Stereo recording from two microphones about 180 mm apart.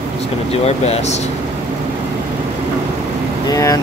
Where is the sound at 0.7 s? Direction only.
35° left (ahead or behind).